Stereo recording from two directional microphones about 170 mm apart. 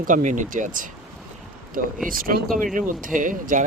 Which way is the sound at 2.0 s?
55° right (ahead or behind).